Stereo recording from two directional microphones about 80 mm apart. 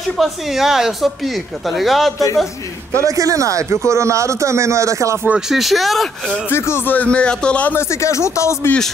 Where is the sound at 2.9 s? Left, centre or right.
Right.